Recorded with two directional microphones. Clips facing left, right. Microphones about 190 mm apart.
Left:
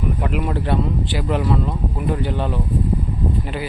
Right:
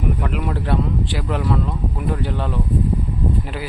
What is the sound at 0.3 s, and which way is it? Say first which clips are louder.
Speech: left 3 dB; centre (ahead or behind).